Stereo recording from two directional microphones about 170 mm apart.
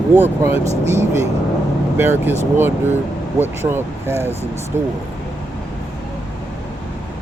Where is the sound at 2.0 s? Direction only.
15° right (ahead or behind).